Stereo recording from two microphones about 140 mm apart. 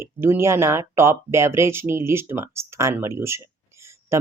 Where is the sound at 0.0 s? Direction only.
15° right (ahead or behind).